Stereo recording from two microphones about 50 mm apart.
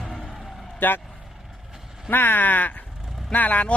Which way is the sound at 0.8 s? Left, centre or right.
Left.